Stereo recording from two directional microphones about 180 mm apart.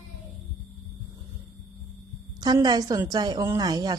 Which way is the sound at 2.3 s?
20° right (ahead or behind).